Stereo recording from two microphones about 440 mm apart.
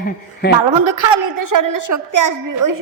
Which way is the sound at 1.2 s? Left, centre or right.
Right.